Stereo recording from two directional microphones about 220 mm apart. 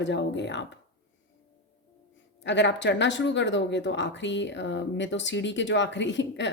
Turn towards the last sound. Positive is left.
turn(degrees=55)  # may be behind; listen again after turning